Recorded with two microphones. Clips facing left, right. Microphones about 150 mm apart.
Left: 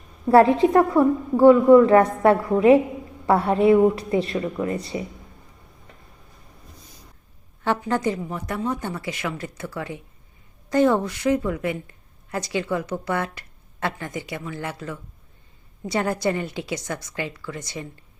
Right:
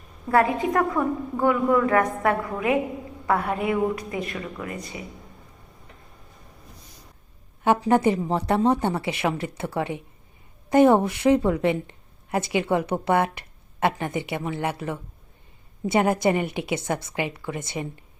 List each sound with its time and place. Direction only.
0.3 s a woman's voice: 30° left (ahead or behind)
7.9 s a woman's voice: 20° right (ahead or behind)